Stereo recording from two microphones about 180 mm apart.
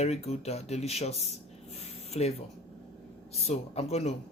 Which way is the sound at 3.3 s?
35° left (ahead or behind).